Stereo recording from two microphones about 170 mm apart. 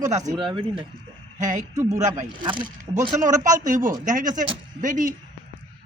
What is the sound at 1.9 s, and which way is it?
Speech, 45° right (ahead or behind).